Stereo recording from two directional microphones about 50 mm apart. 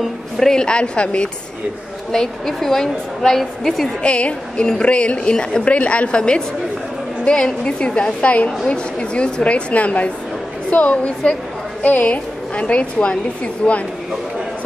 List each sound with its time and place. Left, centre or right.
0.5 s a woman's voice: centre
2.1 s a woman's voice: centre
4.0 s a woman's voice: left
13.6 s speech: centre